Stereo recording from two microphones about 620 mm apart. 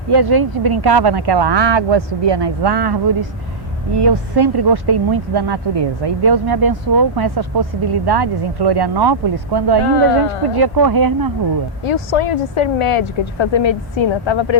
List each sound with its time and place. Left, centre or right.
0.1 s speech: right
9.8 s speech: left
10.5 s speech: right
11.8 s speech: left